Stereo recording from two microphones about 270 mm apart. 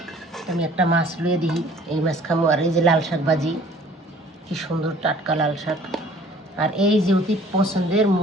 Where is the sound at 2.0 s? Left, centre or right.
Centre.